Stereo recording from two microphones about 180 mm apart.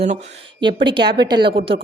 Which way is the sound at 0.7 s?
70° right (ahead or behind).